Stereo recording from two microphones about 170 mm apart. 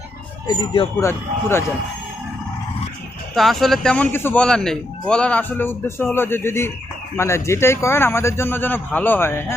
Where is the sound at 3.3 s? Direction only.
Centre (ahead or behind).